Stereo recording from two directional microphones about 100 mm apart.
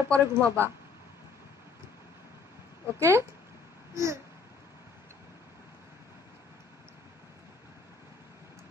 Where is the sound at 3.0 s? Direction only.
30° right (ahead or behind).